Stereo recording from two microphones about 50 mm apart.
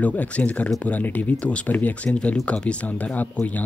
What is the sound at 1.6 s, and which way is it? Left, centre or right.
Speech, left.